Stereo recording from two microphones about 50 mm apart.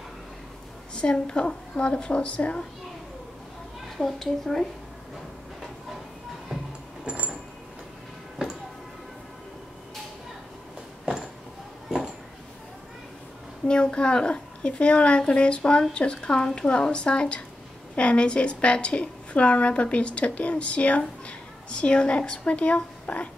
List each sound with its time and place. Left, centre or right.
0.9 s a woman's voice: centre
4.0 s a woman's voice: centre
7.1 s a sound: right
13.7 s a woman's voice: centre